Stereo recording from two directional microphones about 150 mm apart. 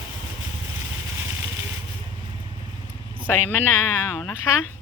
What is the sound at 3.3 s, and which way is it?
Speech, 15° left (ahead or behind).